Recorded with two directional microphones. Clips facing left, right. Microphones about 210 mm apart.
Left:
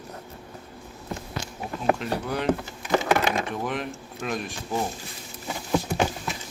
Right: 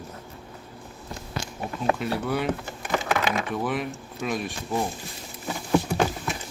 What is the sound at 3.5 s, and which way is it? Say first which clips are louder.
Speech: right 2 dB; centre (ahead or behind).